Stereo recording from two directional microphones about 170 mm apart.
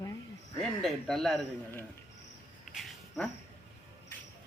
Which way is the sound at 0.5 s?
Centre (ahead or behind).